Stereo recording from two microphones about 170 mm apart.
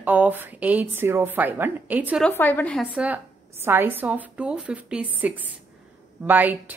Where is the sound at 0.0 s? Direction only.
10° right (ahead or behind).